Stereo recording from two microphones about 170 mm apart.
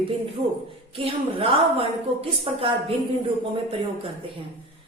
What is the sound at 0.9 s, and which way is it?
A woman's voice, 35° right (ahead or behind).